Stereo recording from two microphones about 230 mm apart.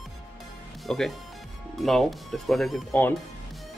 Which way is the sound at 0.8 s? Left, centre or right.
Centre.